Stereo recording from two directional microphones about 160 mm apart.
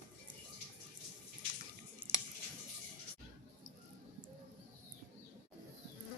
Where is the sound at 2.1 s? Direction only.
10° right (ahead or behind).